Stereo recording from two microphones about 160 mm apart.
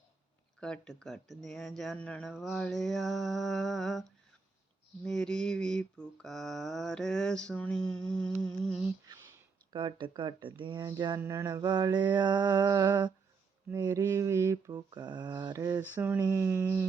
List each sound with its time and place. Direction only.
0.6 s speech: 5° left (ahead or behind)
5.0 s speech: 5° left (ahead or behind)
9.7 s mantra: 30° right (ahead or behind)
16.2 s a sound: 15° right (ahead or behind)